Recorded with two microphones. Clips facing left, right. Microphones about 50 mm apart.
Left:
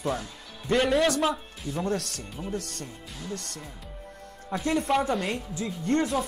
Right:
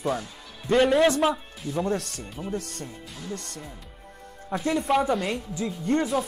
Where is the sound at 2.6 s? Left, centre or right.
Left.